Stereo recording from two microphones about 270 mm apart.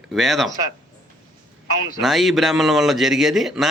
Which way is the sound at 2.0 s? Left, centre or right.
Centre.